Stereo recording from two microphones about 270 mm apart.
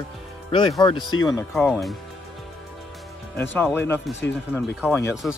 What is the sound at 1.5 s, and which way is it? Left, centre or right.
Speech, centre.